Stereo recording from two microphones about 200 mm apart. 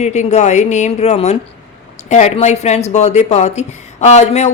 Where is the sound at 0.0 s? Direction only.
35° left (ahead or behind).